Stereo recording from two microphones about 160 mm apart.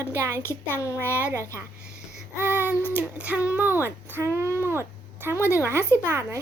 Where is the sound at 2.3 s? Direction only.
15° left (ahead or behind).